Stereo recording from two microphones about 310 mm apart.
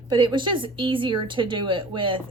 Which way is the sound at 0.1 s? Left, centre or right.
Centre.